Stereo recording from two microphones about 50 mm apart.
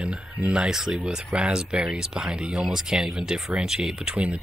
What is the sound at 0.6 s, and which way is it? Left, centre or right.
Speech, centre.